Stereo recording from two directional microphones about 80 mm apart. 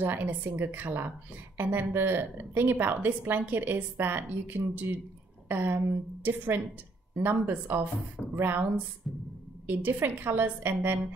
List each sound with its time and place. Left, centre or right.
0.0 s a woman's voice: right
9.1 s speech: centre
9.7 s a woman's voice: right